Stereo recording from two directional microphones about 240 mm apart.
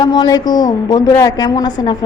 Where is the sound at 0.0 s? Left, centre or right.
Centre.